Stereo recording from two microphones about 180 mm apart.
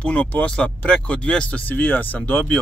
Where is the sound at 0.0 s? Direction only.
5° left (ahead or behind).